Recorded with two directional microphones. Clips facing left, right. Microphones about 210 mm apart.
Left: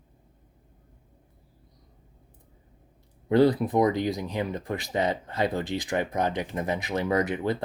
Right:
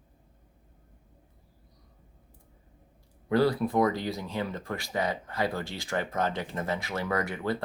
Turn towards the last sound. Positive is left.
turn(degrees=20)  # may be behind; listen again after turning